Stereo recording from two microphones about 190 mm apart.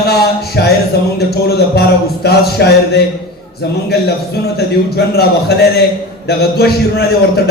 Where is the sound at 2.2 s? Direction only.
55° left (ahead or behind).